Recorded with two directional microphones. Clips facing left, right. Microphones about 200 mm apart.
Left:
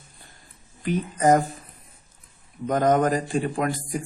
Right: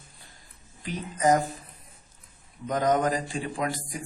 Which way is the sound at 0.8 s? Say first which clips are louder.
Left 5 dB; 50° left (ahead or behind).